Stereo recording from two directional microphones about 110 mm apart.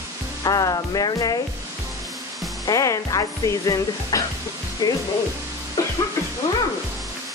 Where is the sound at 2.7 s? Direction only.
30° left (ahead or behind).